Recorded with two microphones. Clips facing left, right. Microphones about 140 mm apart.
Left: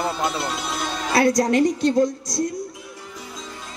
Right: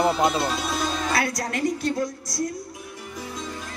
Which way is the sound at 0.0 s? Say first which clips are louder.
Right 3 dB; 20° right (ahead or behind).